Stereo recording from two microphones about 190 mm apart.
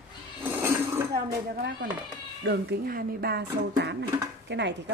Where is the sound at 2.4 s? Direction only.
60° right (ahead or behind).